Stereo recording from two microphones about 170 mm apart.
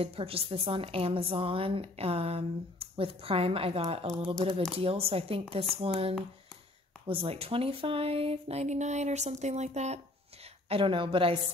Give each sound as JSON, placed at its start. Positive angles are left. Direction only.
{"t": 0.0, "sound": "a woman's voice", "side_deg": -35}